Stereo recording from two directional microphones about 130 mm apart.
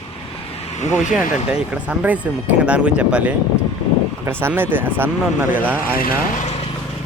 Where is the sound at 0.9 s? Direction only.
5° right (ahead or behind).